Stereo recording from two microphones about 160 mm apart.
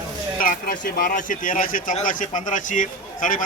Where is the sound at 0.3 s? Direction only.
60° left (ahead or behind).